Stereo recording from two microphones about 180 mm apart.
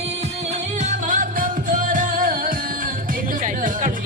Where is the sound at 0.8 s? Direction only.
45° right (ahead or behind).